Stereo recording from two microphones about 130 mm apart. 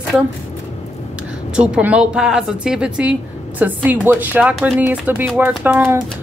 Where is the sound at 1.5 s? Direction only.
10° right (ahead or behind).